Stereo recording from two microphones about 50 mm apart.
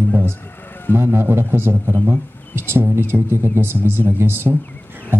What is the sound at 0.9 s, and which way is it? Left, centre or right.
A man's voice, right.